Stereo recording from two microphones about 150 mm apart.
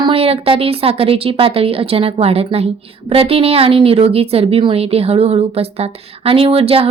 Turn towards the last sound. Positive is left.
turn(degrees=-40)  # may be behind; listen again after turning